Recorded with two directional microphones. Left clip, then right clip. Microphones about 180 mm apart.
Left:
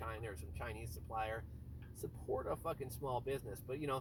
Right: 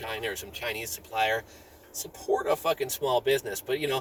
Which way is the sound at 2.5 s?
15° right (ahead or behind).